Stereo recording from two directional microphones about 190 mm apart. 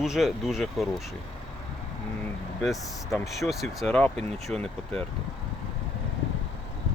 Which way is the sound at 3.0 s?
15° left (ahead or behind).